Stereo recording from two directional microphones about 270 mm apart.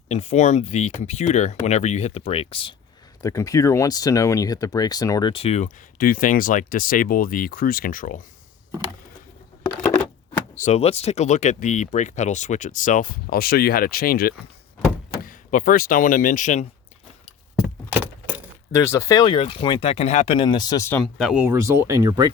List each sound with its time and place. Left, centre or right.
0.1 s speech: left
9.8 s a sound: centre
10.6 s speech: left
17.6 s vehicle: centre
18.7 s speech: centre
21.0 s speech: centre